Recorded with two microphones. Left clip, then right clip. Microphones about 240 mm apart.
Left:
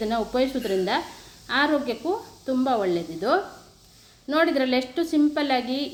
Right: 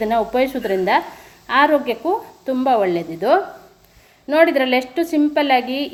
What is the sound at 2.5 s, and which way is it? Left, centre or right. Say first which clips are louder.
Speech: right 7 dB; centre.